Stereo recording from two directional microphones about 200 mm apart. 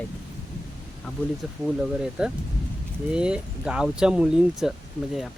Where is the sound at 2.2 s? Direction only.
5° right (ahead or behind).